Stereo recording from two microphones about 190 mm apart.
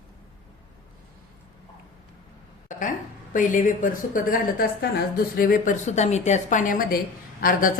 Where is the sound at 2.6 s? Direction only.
45° left (ahead or behind).